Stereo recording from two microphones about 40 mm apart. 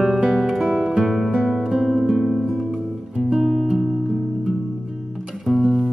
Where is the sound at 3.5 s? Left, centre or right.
Centre.